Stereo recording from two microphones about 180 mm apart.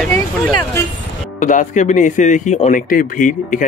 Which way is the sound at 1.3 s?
45° left (ahead or behind).